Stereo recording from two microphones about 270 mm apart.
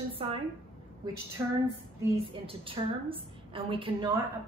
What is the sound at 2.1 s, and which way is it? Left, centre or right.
A woman's voice, centre.